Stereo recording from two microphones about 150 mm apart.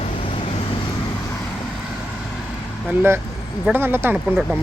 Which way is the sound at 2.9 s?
15° right (ahead or behind).